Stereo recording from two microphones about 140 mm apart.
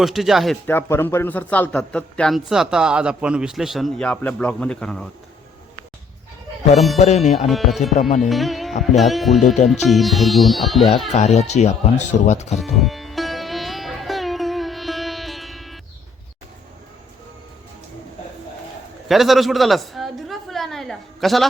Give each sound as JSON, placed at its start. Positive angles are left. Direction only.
{"t": 0.0, "sound": "speech", "side_deg": 0}
{"t": 0.7, "sound": "a man's voice", "side_deg": 15}
{"t": 6.7, "sound": "speech", "side_deg": 0}
{"t": 7.0, "sound": "music", "side_deg": 55}
{"t": 7.4, "sound": "speech", "side_deg": 0}
{"t": 8.3, "sound": "music", "side_deg": 0}
{"t": 9.0, "sound": "speech", "side_deg": 0}
{"t": 11.1, "sound": "speech", "side_deg": 55}
{"t": 12.5, "sound": "sitar", "side_deg": 0}
{"t": 19.0, "sound": "a sound", "side_deg": 0}